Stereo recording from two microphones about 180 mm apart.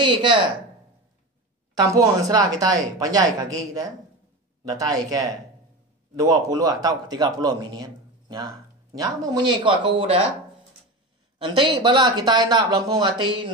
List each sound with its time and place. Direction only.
0.0 s a man's voice: 25° right (ahead or behind)
2.0 s a man's voice: 20° right (ahead or behind)
11.3 s a man's voice: 25° right (ahead or behind)